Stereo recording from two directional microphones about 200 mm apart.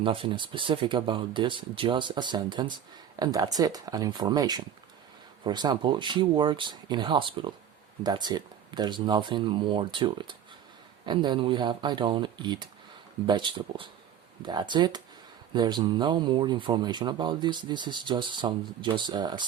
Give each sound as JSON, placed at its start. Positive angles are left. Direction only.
{"t": 0.0, "sound": "speech", "side_deg": -25}